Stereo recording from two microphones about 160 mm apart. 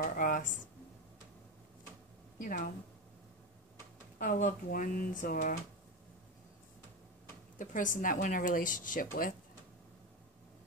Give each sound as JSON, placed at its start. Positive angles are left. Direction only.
{"t": 0.0, "sound": "speech", "side_deg": 55}
{"t": 2.4, "sound": "speech", "side_deg": 55}
{"t": 4.2, "sound": "speech", "side_deg": 55}
{"t": 7.5, "sound": "speech", "side_deg": 55}